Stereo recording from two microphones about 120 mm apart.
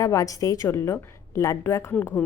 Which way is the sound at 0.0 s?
30° left (ahead or behind).